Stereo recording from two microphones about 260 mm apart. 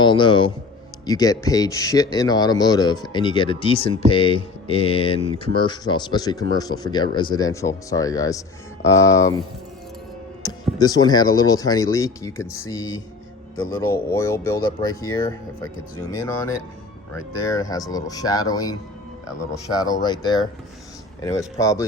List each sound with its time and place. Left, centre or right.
0.0 s speech: centre
10.4 s speech: centre